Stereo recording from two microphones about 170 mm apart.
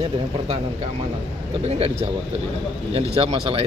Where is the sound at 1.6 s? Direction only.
35° right (ahead or behind).